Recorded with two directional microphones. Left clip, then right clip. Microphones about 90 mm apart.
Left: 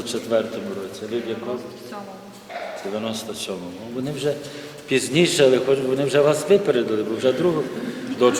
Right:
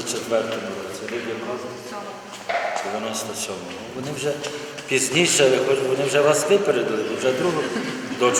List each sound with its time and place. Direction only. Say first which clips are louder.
0.3 s a man's voice: left 1 dB; 10° left (ahead or behind)
3.1 s a man's voice: right 1 dB; centre (ahead or behind)
4.9 s a man's voice: even; centre (ahead or behind)